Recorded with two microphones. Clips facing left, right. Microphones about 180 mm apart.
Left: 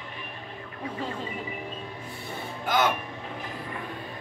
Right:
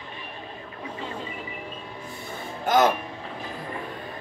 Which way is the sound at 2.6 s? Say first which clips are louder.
Right 5 dB; 40° right (ahead or behind).